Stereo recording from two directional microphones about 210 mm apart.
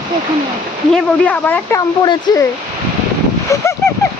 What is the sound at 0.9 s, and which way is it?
Speech, 5° left (ahead or behind).